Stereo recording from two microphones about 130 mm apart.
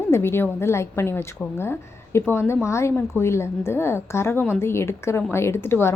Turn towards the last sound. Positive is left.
turn(degrees=20)  # may be behind; listen again after turning